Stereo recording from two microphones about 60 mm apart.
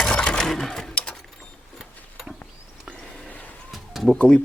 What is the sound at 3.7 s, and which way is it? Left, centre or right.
Bird, centre.